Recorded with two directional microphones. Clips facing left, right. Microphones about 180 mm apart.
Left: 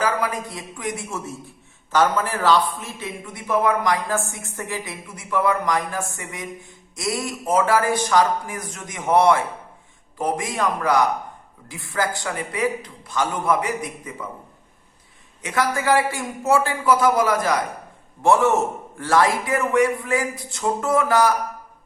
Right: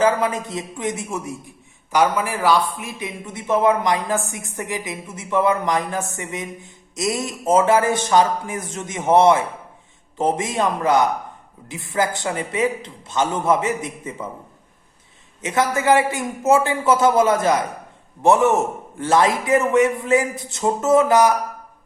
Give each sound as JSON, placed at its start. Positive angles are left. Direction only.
{"t": 0.0, "sound": "a man's voice", "side_deg": -25}
{"t": 15.4, "sound": "a man's voice", "side_deg": -20}